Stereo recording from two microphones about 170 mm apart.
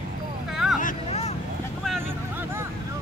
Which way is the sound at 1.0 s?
35° left (ahead or behind).